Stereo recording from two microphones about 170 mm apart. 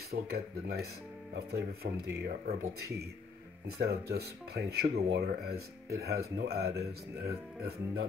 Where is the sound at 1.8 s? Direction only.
60° right (ahead or behind).